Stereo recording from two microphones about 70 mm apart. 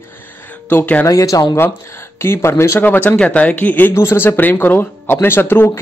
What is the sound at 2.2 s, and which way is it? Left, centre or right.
Speech, left.